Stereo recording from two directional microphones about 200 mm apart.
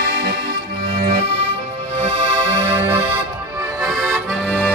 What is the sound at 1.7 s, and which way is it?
Music, 25° right (ahead or behind).